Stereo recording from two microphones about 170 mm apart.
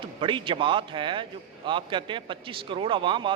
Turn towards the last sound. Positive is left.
turn(degrees=-30)  # may be behind; listen again after turning